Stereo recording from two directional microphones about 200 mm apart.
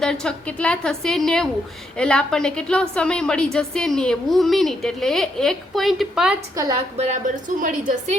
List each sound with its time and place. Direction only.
0.0 s a woman's voice: 5° left (ahead or behind)
6.9 s a woman's voice: 40° right (ahead or behind)